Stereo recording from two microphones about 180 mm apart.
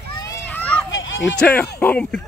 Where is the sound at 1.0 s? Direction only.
90° left.